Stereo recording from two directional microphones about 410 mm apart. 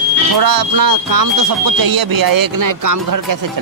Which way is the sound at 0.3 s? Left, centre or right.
Right.